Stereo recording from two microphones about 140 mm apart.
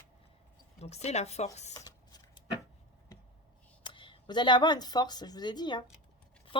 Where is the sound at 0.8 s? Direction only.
50° left (ahead or behind).